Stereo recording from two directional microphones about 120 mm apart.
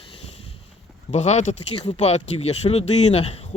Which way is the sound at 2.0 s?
60° left (ahead or behind).